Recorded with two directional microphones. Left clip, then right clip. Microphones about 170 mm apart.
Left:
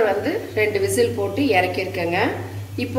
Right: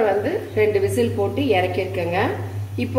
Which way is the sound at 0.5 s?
30° right (ahead or behind).